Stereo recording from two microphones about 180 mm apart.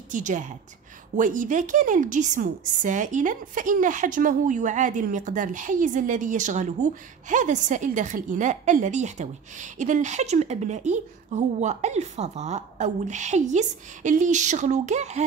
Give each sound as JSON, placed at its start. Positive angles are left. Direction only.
{"t": 0.1, "sound": "a woman's voice", "side_deg": -45}